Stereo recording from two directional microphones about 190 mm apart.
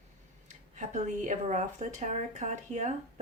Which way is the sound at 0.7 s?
40° right (ahead or behind).